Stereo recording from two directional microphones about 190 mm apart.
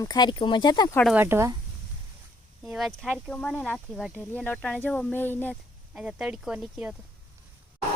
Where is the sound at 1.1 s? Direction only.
15° right (ahead or behind).